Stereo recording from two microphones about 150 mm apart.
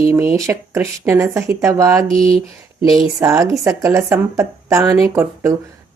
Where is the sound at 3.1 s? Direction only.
20° right (ahead or behind).